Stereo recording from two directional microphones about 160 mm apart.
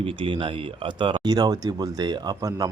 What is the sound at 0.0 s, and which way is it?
Speech, 35° right (ahead or behind).